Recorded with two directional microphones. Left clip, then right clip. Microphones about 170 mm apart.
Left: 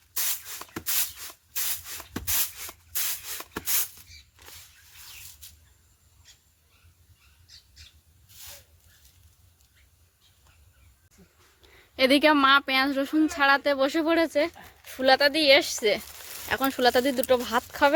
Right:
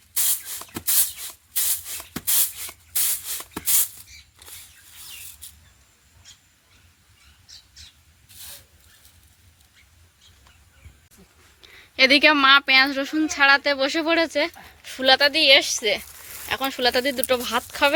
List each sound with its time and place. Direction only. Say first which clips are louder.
0.2 s spray: right 4 dB; 10° right (ahead or behind)
2.6 s rub: right 4 dB; centre (ahead or behind)
11.6 s speech: right 6 dB; 15° left (ahead or behind)
15.3 s a woman's voice: right 4 dB; 25° left (ahead or behind)